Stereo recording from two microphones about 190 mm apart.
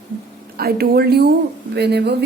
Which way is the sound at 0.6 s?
55° right (ahead or behind).